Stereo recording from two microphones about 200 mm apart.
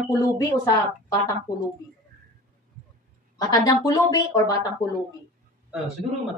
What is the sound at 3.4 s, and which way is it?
A woman's voice, 20° left (ahead or behind).